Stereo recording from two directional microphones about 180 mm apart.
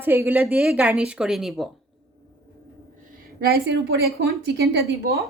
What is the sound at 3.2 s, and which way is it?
A woman's voice, 60° right (ahead or behind).